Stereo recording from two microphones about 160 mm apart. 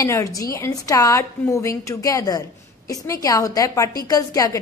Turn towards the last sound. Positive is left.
turn(degrees=20)  # may be behind; listen again after turning